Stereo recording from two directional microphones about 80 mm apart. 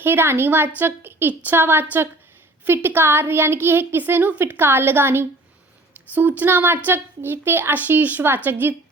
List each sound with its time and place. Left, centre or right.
0.0 s a woman's voice: right